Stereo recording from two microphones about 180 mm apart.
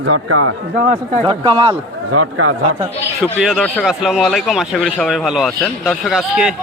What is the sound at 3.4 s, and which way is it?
Speech, centre (ahead or behind).